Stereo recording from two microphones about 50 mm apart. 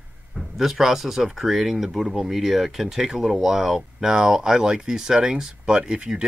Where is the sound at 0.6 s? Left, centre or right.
Centre.